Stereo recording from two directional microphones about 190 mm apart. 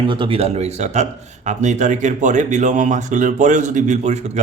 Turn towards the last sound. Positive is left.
turn(degrees=-35)  # may be behind; listen again after turning